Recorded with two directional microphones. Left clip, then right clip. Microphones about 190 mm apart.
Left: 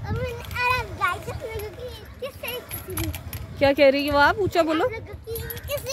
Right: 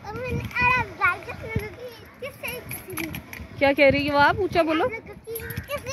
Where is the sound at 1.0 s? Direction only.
40° left (ahead or behind).